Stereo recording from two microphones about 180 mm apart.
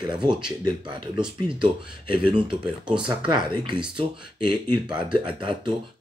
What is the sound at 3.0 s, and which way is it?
Speech, 25° right (ahead or behind).